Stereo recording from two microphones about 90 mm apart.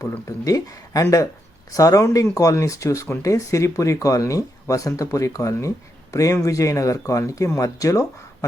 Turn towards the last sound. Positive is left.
turn(degrees=40)  # may be behind; listen again after turning